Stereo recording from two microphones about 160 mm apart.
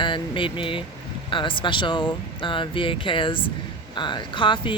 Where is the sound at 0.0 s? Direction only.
30° left (ahead or behind).